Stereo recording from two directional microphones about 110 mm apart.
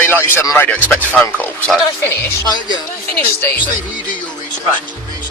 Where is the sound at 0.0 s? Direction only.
20° left (ahead or behind).